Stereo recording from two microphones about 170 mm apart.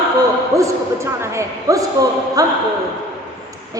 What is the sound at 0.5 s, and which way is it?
A man's voice, 15° right (ahead or behind).